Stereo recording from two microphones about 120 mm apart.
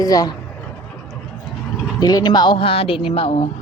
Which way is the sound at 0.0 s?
30° left (ahead or behind).